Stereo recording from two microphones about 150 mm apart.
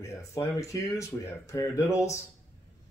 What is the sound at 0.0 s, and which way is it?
Speech, 20° left (ahead or behind).